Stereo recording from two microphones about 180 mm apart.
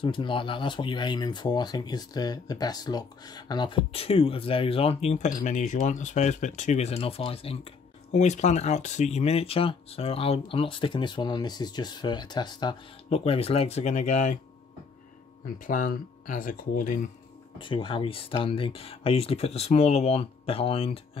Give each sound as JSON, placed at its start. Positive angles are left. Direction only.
{"t": 0.0, "sound": "speech", "side_deg": 25}
{"t": 15.4, "sound": "speech", "side_deg": 50}
{"t": 17.6, "sound": "speech", "side_deg": 30}